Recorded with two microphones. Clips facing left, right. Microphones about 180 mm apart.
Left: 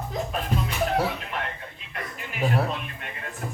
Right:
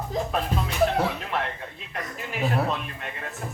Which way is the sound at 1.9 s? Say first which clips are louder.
Right 2 dB; 40° right (ahead or behind).